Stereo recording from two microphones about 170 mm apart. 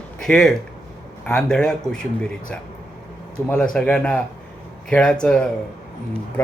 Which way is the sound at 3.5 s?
5° left (ahead or behind).